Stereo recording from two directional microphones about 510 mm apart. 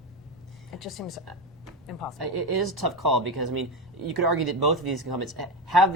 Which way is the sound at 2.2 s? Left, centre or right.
Right.